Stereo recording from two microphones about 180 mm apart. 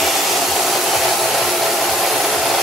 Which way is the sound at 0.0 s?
Centre (ahead or behind).